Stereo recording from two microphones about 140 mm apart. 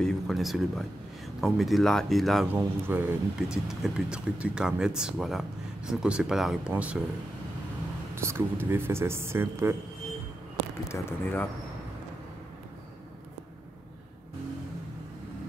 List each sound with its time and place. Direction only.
0.0 s speech: centre (ahead or behind)
2.5 s speech: 15° right (ahead or behind)
8.1 s speech: 20° right (ahead or behind)
10.9 s speech: 15° left (ahead or behind)